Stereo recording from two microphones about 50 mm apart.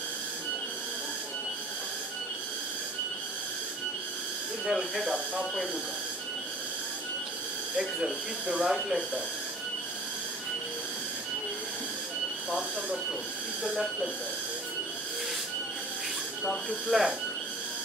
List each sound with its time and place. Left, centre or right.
4.6 s speech: centre
5.0 s speech: centre
7.7 s speech: centre
16.9 s speech: centre